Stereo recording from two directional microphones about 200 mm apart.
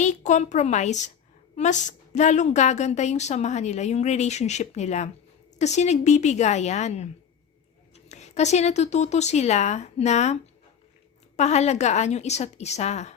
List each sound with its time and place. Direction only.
0.0 s a woman's voice: 35° left (ahead or behind)
11.3 s a woman's voice: 35° left (ahead or behind)